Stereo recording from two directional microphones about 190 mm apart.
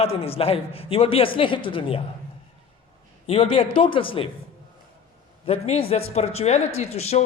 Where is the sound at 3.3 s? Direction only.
30° left (ahead or behind).